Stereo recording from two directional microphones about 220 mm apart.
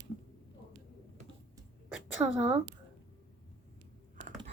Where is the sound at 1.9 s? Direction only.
5° right (ahead or behind).